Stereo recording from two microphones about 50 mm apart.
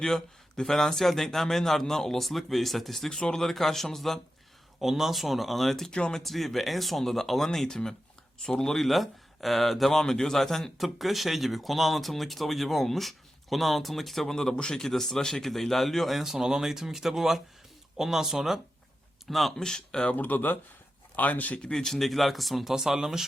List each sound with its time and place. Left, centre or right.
0.0 s speech: centre
4.8 s speech: centre
5.9 s speech: centre
6.1 s speech: centre
19.5 s speech: centre
20.1 s speech: left
21.6 s speech: centre